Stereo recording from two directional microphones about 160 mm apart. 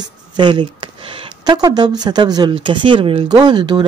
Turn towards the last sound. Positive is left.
turn(degrees=-30)  # may be behind; listen again after turning